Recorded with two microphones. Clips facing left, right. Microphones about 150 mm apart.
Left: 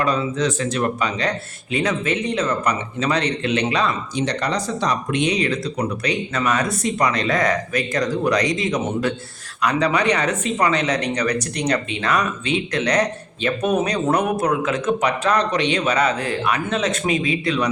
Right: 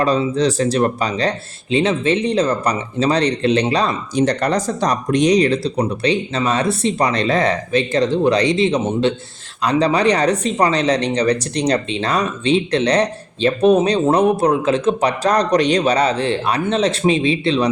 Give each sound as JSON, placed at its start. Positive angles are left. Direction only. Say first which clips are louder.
{"t": 0.0, "sound": "speech", "louder": "right 4 dB", "side_deg": -30}